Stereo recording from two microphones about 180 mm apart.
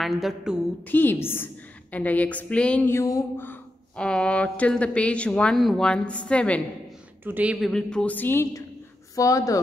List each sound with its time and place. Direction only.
0.0 s a woman's voice: centre (ahead or behind)
0.8 s a woman's voice: 10° left (ahead or behind)
7.2 s speech: 10° right (ahead or behind)
7.7 s a woman's voice: 5° left (ahead or behind)